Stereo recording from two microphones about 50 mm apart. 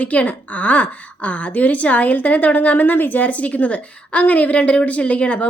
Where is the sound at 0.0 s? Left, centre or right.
Left.